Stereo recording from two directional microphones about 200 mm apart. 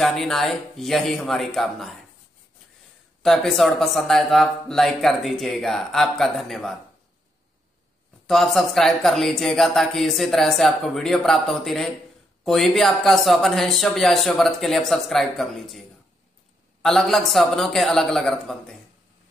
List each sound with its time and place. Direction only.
0.0 s speech: centre (ahead or behind)
3.2 s speech: centre (ahead or behind)
8.3 s speech: centre (ahead or behind)
16.8 s speech: centre (ahead or behind)